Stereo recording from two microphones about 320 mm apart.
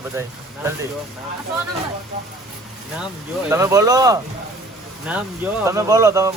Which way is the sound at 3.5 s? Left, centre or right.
Centre.